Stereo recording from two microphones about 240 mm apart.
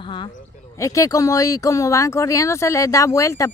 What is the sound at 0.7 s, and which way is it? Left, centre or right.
Speech, centre.